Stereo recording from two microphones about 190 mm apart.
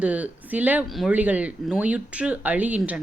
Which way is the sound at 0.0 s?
5° right (ahead or behind).